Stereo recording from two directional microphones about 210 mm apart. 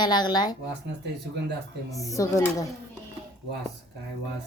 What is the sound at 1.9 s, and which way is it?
Speech, 15° left (ahead or behind).